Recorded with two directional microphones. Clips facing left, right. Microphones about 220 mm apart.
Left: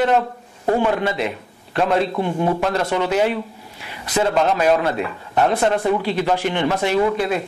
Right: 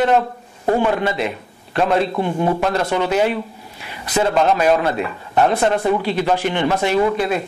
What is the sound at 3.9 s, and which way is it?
Speech, 15° right (ahead or behind).